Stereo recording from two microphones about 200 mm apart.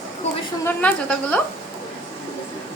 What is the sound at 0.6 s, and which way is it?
Speech, 5° left (ahead or behind).